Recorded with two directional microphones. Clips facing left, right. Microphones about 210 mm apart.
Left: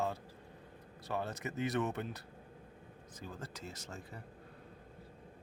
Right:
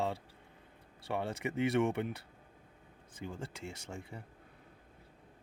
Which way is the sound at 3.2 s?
25° right (ahead or behind).